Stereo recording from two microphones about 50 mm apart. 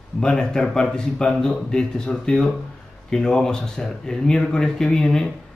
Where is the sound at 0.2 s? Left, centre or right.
Centre.